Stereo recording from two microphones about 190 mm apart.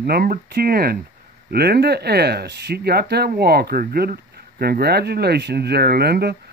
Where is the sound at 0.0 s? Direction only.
50° right (ahead or behind).